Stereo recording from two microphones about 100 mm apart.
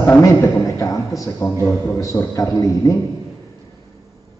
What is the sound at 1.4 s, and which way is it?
Speech, 20° left (ahead or behind).